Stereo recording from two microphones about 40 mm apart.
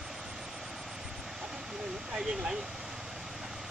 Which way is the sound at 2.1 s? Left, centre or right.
Centre.